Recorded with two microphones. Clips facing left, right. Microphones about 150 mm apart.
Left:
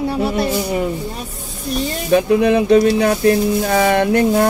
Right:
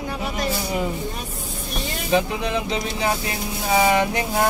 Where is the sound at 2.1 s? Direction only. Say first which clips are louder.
Left 9 dB; 60° left (ahead or behind).